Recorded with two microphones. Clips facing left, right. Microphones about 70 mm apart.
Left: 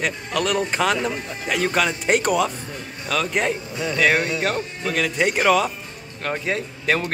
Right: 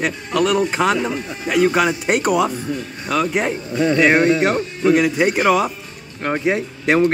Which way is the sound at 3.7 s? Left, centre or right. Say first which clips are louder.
Right 7 dB; right.